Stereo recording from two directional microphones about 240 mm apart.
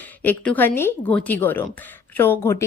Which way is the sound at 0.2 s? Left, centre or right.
Centre.